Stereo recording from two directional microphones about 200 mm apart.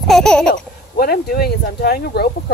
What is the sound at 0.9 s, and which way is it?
Speech, 50° left (ahead or behind).